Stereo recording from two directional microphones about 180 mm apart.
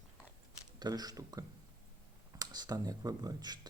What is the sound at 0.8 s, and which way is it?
Speech, 20° right (ahead or behind).